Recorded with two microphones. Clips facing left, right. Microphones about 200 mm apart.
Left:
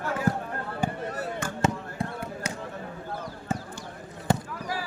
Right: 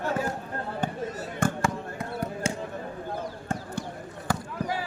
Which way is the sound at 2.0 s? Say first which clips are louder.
Left 5 dB; 30° left (ahead or behind).